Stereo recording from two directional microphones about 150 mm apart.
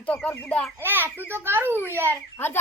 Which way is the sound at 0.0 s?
10° left (ahead or behind).